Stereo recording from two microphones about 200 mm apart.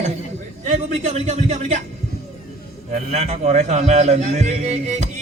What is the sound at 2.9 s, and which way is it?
Speech, 35° right (ahead or behind).